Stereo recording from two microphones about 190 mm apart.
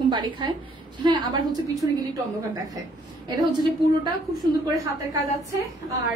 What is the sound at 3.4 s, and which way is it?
Speech, 25° right (ahead or behind).